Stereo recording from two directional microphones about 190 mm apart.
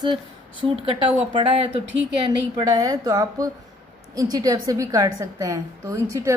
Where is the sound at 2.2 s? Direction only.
20° right (ahead or behind).